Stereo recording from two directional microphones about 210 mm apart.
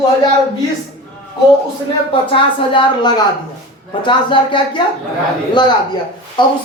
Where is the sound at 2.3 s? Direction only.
25° left (ahead or behind).